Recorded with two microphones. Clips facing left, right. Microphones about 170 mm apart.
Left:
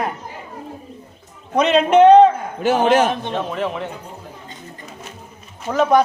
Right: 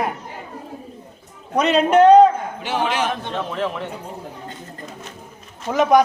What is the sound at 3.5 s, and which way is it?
Speech, centre (ahead or behind).